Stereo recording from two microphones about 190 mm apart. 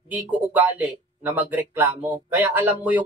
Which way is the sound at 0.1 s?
10° right (ahead or behind).